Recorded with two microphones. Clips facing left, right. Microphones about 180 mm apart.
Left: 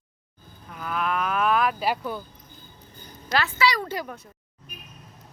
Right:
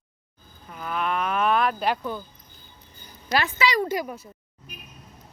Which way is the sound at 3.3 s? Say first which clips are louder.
Right 1 dB; 20° right (ahead or behind).